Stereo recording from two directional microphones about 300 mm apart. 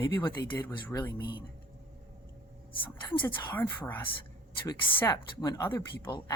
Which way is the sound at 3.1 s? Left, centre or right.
Centre.